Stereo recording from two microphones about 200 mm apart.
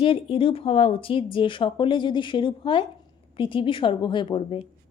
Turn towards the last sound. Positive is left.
turn(degrees=25)  # may be behind; listen again after turning